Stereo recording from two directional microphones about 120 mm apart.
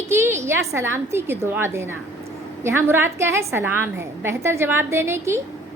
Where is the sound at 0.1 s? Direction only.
20° right (ahead or behind).